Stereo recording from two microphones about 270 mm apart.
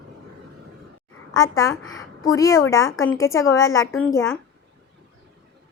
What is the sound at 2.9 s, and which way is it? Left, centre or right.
Speech, left.